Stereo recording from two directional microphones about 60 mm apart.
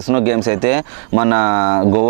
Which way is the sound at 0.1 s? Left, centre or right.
Right.